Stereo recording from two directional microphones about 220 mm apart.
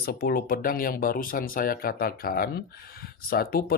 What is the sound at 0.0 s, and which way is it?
Speech, 40° left (ahead or behind).